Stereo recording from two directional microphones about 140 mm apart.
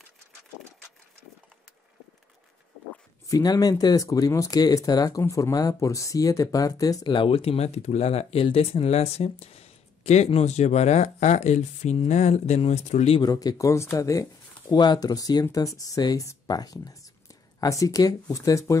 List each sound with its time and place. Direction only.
3.3 s speech: 25° left (ahead or behind); by 13.1 s 55° left (ahead or behind)
13.2 s speech: 25° left (ahead or behind)